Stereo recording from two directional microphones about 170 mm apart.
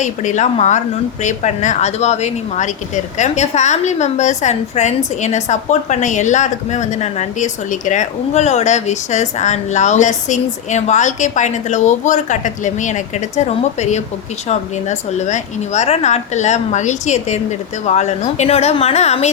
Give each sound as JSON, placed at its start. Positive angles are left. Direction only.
{"t": 0.0, "sound": "speech", "side_deg": 45}